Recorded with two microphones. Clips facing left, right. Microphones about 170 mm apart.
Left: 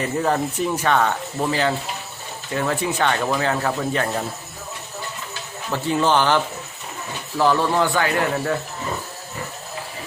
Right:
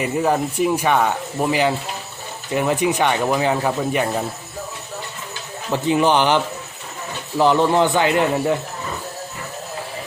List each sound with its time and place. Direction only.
0.0 s speech: 10° right (ahead or behind)
5.7 s a man's voice: 15° right (ahead or behind)